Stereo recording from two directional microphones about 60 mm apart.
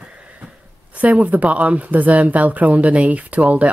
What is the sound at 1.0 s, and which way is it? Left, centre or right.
Speech, right.